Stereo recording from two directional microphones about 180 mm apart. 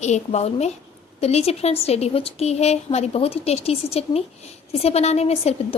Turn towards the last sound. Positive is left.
turn(degrees=35)  # may be behind; listen again after turning